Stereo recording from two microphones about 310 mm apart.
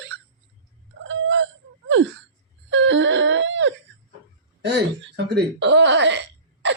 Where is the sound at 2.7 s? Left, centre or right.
Right.